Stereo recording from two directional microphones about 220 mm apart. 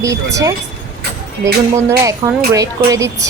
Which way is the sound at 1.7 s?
15° right (ahead or behind).